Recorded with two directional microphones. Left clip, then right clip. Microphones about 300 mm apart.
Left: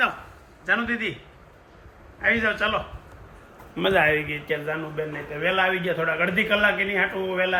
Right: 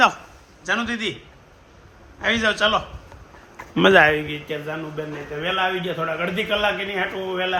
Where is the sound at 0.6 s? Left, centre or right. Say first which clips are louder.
Even; centre.